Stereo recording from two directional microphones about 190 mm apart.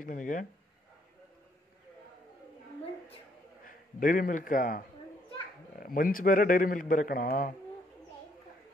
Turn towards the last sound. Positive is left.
turn(degrees=50)  # may be behind; listen again after turning